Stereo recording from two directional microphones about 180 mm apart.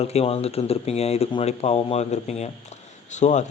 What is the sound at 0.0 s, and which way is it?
Speech, 35° left (ahead or behind).